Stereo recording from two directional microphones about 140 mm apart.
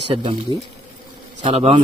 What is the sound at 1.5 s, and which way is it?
Speech, 40° right (ahead or behind).